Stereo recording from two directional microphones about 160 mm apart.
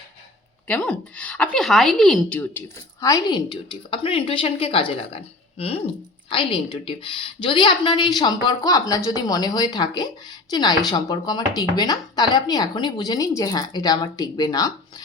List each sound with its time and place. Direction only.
0.7 s a woman's voice: 5° left (ahead or behind); by 14.7 s 25° left (ahead or behind)